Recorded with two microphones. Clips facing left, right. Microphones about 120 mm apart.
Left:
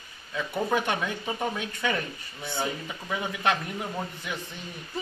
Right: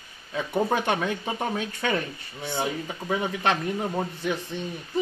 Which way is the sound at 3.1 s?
35° right (ahead or behind).